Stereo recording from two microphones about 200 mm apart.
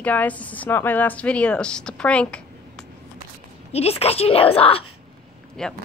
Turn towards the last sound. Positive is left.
turn(degrees=5)  # may be behind; listen again after turning